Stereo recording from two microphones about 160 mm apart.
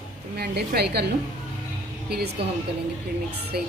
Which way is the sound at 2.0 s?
90° right.